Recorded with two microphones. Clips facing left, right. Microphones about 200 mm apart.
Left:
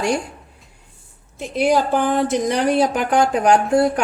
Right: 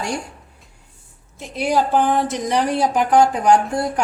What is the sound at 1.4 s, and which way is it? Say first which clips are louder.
A woman's voice: left 2 dB; 60° left (ahead or behind).